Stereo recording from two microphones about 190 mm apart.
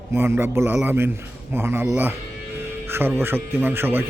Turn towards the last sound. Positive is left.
turn(degrees=-10)  # may be behind; listen again after turning